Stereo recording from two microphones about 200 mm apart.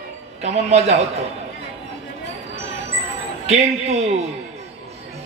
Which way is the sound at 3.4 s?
30° right (ahead or behind).